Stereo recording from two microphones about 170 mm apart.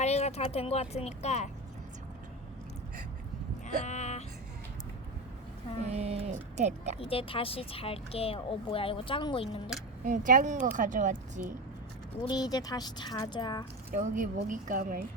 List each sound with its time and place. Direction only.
0.0 s speech: 40° left (ahead or behind)
3.8 s music: 45° left (ahead or behind)
5.8 s speech: 40° right (ahead or behind)
7.0 s speech: 35° left (ahead or behind)
10.0 s speech: 50° right (ahead or behind)
12.2 s speech: 25° left (ahead or behind)
13.9 s speech: 50° right (ahead or behind)